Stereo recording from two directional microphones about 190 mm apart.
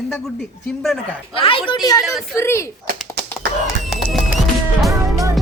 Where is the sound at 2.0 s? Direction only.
Centre (ahead or behind).